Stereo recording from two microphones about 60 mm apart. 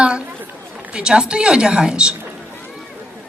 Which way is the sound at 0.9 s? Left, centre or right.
Centre.